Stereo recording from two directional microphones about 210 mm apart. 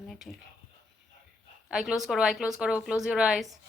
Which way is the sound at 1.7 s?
5° right (ahead or behind).